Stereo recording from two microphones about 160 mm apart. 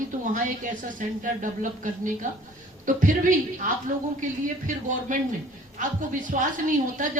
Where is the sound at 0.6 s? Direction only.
55° right (ahead or behind).